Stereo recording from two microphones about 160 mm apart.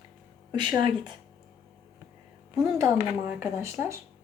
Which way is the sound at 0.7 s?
30° right (ahead or behind).